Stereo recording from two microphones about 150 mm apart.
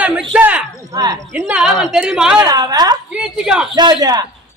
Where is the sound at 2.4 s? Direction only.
25° right (ahead or behind).